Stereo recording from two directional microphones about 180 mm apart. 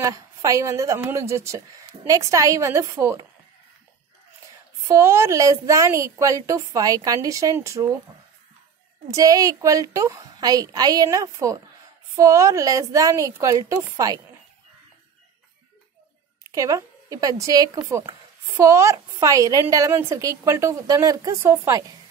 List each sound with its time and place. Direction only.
0.0 s a woman's voice: 20° right (ahead or behind)
4.8 s a woman's voice: 15° right (ahead or behind)
9.1 s a woman's voice: 20° right (ahead or behind)
16.5 s a woman's voice: 20° right (ahead or behind)